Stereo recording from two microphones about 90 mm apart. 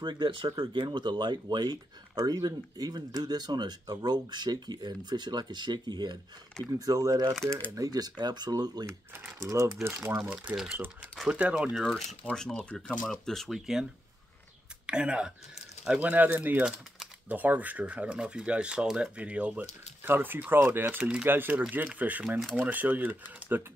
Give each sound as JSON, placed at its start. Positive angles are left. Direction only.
{"t": 0.0, "sound": "speech", "side_deg": -65}
{"t": 0.8, "sound": "speech", "side_deg": -55}
{"t": 6.6, "sound": "speech", "side_deg": -40}
{"t": 9.4, "sound": "speech", "side_deg": -35}
{"t": 10.1, "sound": "speech", "side_deg": -15}
{"t": 11.8, "sound": "speech", "side_deg": 10}
{"t": 14.9, "sound": "speech", "side_deg": -10}
{"t": 20.8, "sound": "speech", "side_deg": -10}
{"t": 21.3, "sound": "speech", "side_deg": -20}